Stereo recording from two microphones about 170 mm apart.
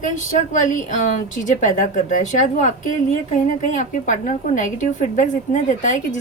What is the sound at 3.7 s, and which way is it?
A woman's voice, 45° left (ahead or behind).